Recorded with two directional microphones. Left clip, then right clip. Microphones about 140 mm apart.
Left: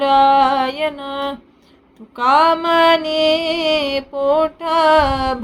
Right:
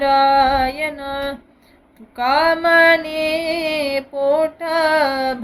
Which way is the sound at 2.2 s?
20° left (ahead or behind).